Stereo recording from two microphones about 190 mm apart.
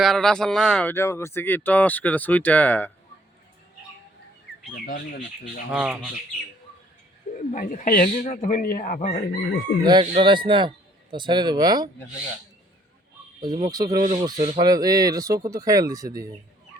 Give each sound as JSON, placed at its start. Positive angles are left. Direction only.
{"t": 0.0, "sound": "speech", "side_deg": 0}
{"t": 4.7, "sound": "speech", "side_deg": 50}
{"t": 5.7, "sound": "speech", "side_deg": -5}
{"t": 7.3, "sound": "speech", "side_deg": 45}
{"t": 9.8, "sound": "speech", "side_deg": -25}
{"t": 13.4, "sound": "speech", "side_deg": -20}